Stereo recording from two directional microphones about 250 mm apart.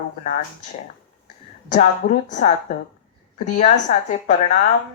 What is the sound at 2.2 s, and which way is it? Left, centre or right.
Speech, left.